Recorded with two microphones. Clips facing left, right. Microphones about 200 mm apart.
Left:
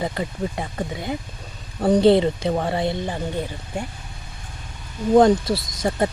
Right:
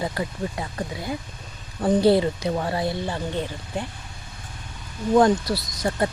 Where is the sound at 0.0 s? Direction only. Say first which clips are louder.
Left 2 dB; 20° left (ahead or behind).